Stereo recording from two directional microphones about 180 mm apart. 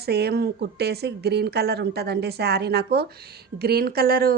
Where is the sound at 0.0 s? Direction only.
60° right (ahead or behind).